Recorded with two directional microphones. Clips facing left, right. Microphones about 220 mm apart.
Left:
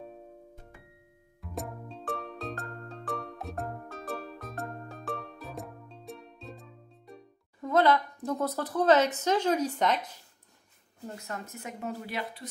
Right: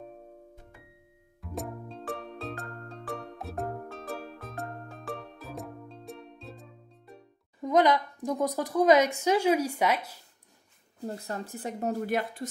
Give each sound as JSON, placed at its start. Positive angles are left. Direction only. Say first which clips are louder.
{"t": 1.4, "sound": "music", "louder": "right 2 dB", "side_deg": 0}
{"t": 7.6, "sound": "a woman's voice", "louder": "right 1 dB", "side_deg": -15}
{"t": 11.1, "sound": "speech", "louder": "right 4 dB", "side_deg": -35}